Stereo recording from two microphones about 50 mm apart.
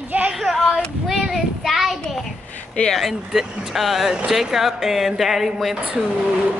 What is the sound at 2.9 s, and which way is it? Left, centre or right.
Speech, centre.